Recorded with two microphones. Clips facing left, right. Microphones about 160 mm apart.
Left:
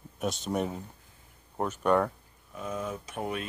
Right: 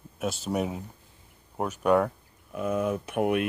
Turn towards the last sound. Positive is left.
turn(degrees=-65)  # may be behind; listen again after turning